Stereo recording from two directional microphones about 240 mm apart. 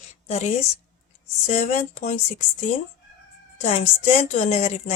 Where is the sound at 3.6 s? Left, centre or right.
Left.